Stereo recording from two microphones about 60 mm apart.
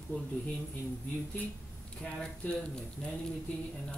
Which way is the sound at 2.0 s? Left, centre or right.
Centre.